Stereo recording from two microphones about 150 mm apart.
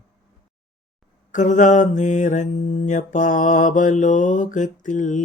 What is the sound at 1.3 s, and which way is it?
Mantra, 55° left (ahead or behind).